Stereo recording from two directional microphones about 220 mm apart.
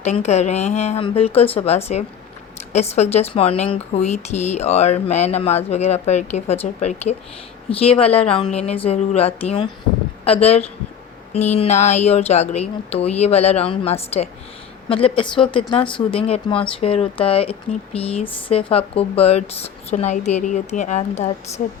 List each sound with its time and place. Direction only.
0.0 s speech: 30° left (ahead or behind)